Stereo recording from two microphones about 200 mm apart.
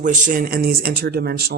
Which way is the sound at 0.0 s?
40° right (ahead or behind).